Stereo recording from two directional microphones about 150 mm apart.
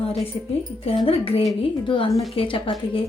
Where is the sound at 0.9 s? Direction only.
35° left (ahead or behind).